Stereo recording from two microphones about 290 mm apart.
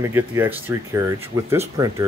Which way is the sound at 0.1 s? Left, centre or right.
Centre.